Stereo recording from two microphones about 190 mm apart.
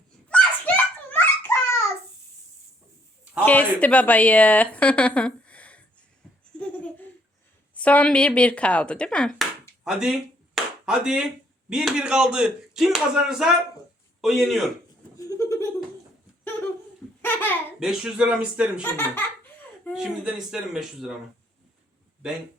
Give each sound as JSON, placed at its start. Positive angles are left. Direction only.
{"t": 0.3, "sound": "a sound", "side_deg": 5}
{"t": 3.4, "sound": "speech", "side_deg": 10}
{"t": 7.8, "sound": "speech", "side_deg": 5}
{"t": 15.2, "sound": "a sound", "side_deg": 15}
{"t": 17.2, "sound": "baby laughter", "side_deg": 10}
{"t": 17.7, "sound": "speech", "side_deg": -5}
{"t": 19.9, "sound": "speech", "side_deg": -5}